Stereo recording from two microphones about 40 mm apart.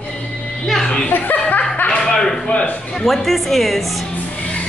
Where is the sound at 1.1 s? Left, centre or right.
Left.